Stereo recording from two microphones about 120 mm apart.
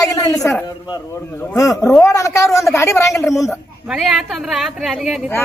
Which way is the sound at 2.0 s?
25° left (ahead or behind).